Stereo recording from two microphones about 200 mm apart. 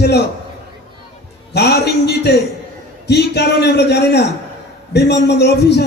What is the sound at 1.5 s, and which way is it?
A man's voice, 55° left (ahead or behind).